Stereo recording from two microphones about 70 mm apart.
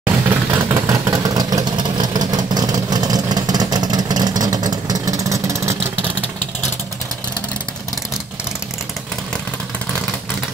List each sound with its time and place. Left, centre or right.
0.0 s vehicle: right
0.7 s vehicle: right